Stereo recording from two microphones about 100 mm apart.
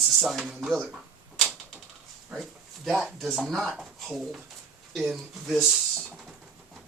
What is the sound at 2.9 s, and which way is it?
Speech, centre (ahead or behind).